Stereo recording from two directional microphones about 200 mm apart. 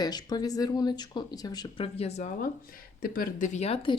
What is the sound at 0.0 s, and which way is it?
Speech, 20° left (ahead or behind).